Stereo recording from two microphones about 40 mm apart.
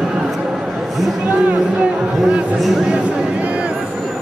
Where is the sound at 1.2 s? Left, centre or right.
Right.